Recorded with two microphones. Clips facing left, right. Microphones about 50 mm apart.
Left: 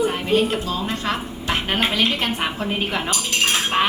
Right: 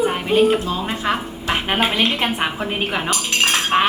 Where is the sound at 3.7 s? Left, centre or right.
Centre.